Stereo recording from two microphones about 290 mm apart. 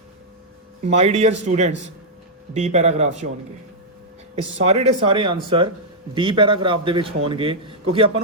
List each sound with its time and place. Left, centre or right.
0.8 s speech: right
4.5 s a man's voice: right